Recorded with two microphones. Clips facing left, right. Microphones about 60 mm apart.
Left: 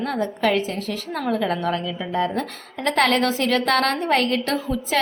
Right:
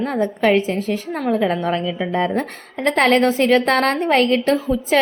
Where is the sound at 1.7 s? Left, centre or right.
Right.